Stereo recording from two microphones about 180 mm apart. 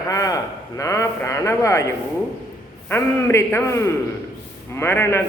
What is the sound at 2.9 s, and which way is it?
Speech, 10° left (ahead or behind).